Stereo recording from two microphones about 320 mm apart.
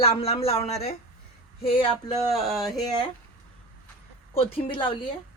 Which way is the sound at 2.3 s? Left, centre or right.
Centre.